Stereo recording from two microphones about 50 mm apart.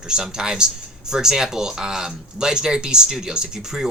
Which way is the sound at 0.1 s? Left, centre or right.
Centre.